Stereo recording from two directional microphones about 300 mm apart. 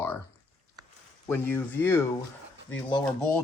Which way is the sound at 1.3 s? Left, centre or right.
Centre.